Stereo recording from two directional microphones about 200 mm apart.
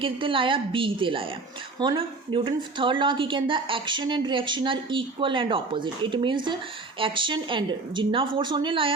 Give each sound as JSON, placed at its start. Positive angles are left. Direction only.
{"t": 0.0, "sound": "a woman's voice", "side_deg": -25}